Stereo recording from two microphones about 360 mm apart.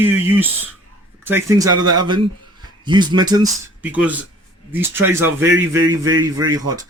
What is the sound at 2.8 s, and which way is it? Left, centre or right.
A man's voice, centre.